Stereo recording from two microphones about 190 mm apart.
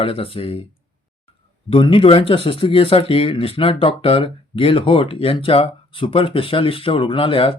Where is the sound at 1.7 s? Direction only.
30° left (ahead or behind).